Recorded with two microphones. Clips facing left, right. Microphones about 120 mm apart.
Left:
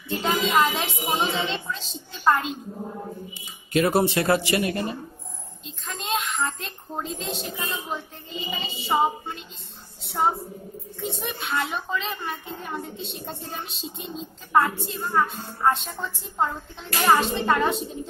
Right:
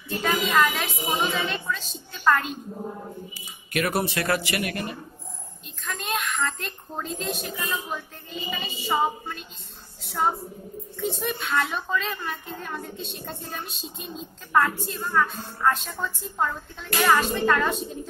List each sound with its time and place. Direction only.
0.1 s a woman's voice: 25° left (ahead or behind)